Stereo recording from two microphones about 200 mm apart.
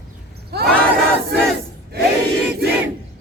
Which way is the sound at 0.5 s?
55° right (ahead or behind).